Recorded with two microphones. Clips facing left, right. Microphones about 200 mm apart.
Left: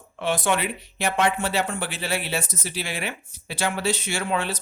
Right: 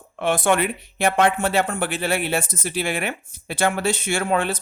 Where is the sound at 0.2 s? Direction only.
55° right (ahead or behind).